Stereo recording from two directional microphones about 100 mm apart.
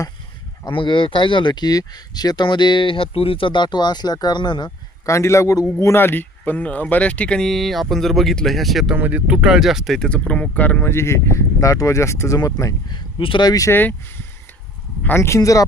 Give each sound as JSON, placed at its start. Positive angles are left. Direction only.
{"t": 0.7, "sound": "speech", "side_deg": 55}
{"t": 5.0, "sound": "a man's voice", "side_deg": 30}
{"t": 9.0, "sound": "speech", "side_deg": -15}
{"t": 12.9, "sound": "speech", "side_deg": 60}
{"t": 13.4, "sound": "a man's voice", "side_deg": 40}
{"t": 13.7, "sound": "speech", "side_deg": 20}
{"t": 15.0, "sound": "speech", "side_deg": 25}